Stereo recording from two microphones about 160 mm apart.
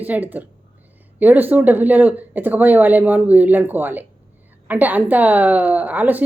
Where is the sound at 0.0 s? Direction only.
10° right (ahead or behind).